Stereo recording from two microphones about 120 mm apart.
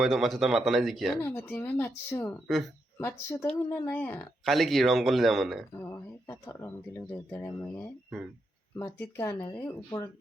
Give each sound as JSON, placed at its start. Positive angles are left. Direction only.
{"t": 0.0, "sound": "speech", "side_deg": 0}
{"t": 1.2, "sound": "speech", "side_deg": 15}
{"t": 4.4, "sound": "speech", "side_deg": 0}
{"t": 5.7, "sound": "speech", "side_deg": 20}